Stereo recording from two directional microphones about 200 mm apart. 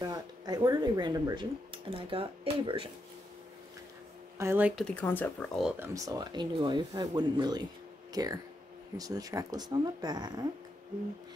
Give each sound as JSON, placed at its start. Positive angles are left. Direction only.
{"t": 0.0, "sound": "speech", "side_deg": -20}
{"t": 4.4, "sound": "speech", "side_deg": -10}
{"t": 4.8, "sound": "speech", "side_deg": 10}
{"t": 5.6, "sound": "speech", "side_deg": -5}
{"t": 5.9, "sound": "speech", "side_deg": -20}